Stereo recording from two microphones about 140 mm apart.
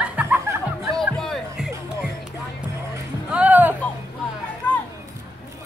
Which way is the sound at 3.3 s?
10° right (ahead or behind).